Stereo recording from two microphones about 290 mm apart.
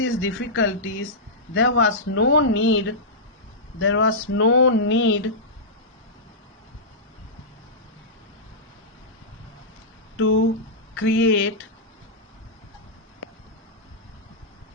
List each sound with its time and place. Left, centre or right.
0.0 s speech: left
3.8 s a sound: left
10.2 s speech: left